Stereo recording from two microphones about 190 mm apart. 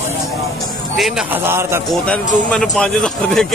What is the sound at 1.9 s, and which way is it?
Speech, 5° left (ahead or behind).